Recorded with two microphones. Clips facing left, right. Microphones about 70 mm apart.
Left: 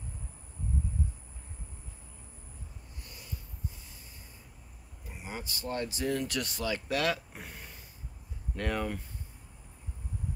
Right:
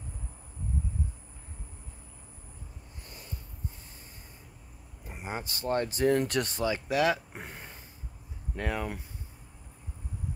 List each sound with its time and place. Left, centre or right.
5.0 s speech: right
6.6 s speech: centre
7.3 s a sound: right
8.5 s speech: centre